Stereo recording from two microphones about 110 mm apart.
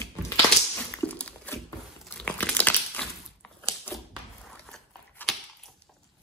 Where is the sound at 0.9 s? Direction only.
10° left (ahead or behind).